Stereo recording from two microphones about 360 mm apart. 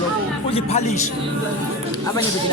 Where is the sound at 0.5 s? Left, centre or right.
Centre.